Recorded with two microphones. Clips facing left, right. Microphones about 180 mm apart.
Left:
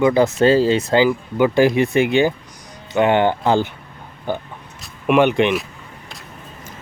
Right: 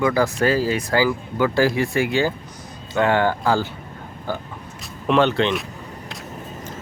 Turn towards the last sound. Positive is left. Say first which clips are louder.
# left 3 dB
turn(degrees=15)  # may be behind; listen again after turning